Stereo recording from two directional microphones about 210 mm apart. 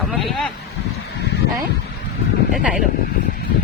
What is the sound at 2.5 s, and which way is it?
Speech, 5° right (ahead or behind).